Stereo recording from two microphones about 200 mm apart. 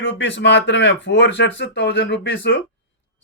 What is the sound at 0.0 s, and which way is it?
A man's voice, 65° left (ahead or behind).